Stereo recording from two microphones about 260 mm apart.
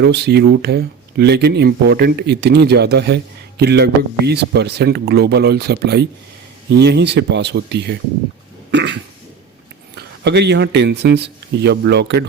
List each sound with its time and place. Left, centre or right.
0.0 s speech: right
8.7 s cough: right
9.9 s a man's voice: right